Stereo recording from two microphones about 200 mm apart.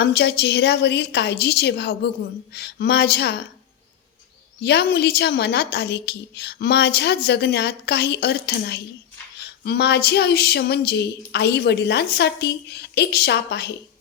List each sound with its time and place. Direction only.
0.0 s a woman's voice: 55° left (ahead or behind)
4.6 s a woman's voice: 55° left (ahead or behind)